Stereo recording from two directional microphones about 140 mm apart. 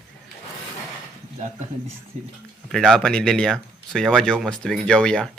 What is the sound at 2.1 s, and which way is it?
Speech, 55° right (ahead or behind).